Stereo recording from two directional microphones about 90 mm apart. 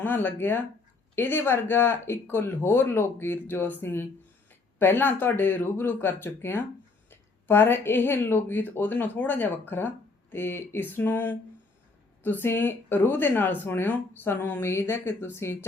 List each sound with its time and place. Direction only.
0.0 s speech: 20° left (ahead or behind)